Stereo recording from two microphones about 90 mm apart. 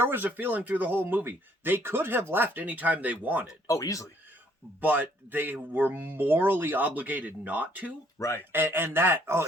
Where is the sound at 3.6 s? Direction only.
40° left (ahead or behind).